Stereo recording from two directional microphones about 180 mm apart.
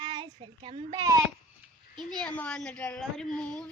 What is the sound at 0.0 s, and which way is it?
Child singing, 25° right (ahead or behind).